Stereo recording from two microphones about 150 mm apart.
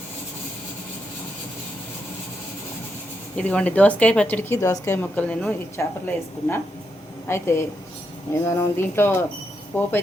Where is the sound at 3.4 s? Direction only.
10° left (ahead or behind).